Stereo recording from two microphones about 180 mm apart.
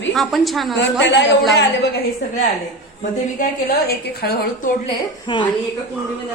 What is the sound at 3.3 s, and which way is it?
A woman's voice, 60° left (ahead or behind).